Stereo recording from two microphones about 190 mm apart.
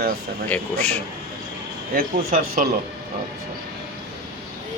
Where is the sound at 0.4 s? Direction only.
5° left (ahead or behind).